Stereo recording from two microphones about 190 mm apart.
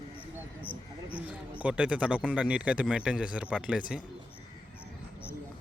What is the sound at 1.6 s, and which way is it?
Speech, 5° right (ahead or behind).